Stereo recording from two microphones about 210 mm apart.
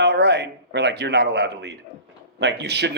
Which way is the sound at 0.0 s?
55° right (ahead or behind).